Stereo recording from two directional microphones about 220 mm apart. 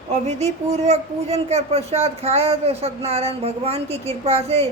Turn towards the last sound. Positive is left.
turn(degrees=-30)  # may be behind; listen again after turning